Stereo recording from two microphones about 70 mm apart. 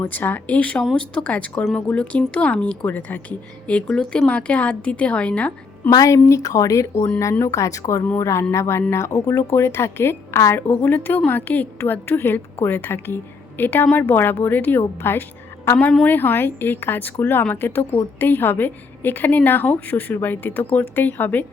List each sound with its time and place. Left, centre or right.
0.0 s a woman's voice: left
5.9 s a woman's voice: left
15.8 s a woman's voice: centre
16.0 s a woman's voice: left